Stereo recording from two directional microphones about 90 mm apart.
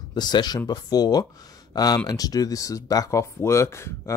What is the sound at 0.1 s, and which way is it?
Speech, 55° left (ahead or behind).